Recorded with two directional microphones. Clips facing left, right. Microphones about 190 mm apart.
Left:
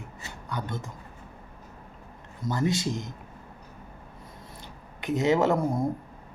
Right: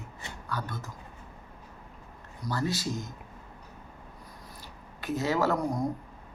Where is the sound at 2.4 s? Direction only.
20° left (ahead or behind).